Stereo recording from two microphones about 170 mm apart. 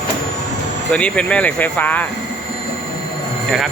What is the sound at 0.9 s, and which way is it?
Speech, 5° left (ahead or behind).